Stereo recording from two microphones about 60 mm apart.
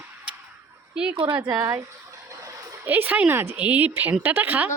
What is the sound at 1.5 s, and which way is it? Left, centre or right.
Speech, right.